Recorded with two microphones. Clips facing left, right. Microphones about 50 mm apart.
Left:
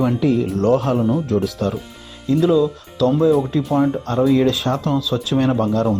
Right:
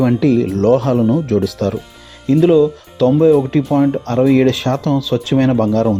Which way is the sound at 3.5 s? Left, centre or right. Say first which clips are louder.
Right 5 dB; right.